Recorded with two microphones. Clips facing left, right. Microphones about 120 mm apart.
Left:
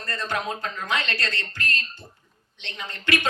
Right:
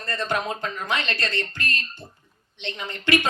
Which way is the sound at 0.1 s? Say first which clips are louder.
Right 2 dB; 20° right (ahead or behind).